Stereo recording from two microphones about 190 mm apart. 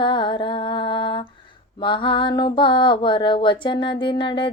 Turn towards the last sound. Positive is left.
turn(degrees=25)  # may be behind; listen again after turning